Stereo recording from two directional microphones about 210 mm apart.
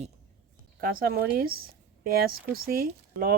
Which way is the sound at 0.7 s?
45° right (ahead or behind).